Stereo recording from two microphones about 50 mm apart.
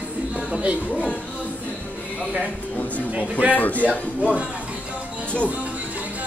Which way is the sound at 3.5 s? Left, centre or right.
Left.